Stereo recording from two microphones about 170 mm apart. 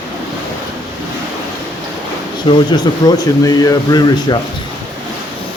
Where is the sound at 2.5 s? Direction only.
30° left (ahead or behind).